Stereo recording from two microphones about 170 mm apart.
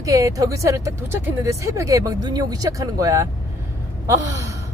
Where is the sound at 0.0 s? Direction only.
20° right (ahead or behind).